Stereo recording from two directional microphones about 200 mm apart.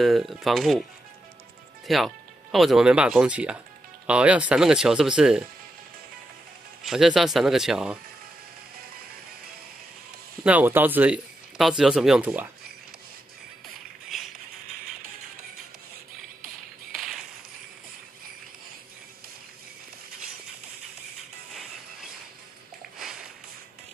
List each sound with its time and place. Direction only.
0.0 s speech: centre (ahead or behind)
1.9 s speech: centre (ahead or behind)
6.8 s speech: centre (ahead or behind)
10.4 s speech: 10° right (ahead or behind)
14.0 s a sound: centre (ahead or behind)
22.9 s a sound: 5° right (ahead or behind)